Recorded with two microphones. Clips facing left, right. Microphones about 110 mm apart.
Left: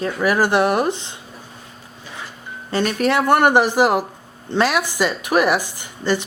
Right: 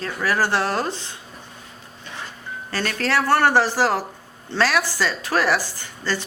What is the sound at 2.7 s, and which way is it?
A woman's voice, 20° left (ahead or behind).